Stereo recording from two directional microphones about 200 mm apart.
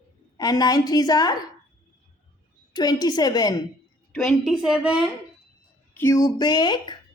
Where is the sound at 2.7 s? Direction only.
20° left (ahead or behind).